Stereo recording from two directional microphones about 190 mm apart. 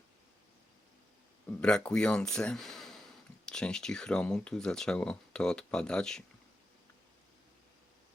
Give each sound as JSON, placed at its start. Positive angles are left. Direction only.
{"t": 1.5, "sound": "speech", "side_deg": 5}